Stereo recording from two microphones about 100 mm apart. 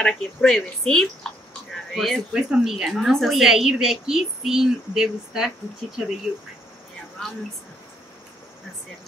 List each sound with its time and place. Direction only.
0.0 s a woman's voice: 5° left (ahead or behind)
7.2 s speech: 10° left (ahead or behind)